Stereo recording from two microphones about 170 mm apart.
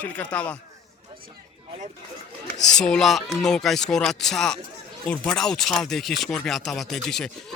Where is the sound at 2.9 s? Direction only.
Centre (ahead or behind).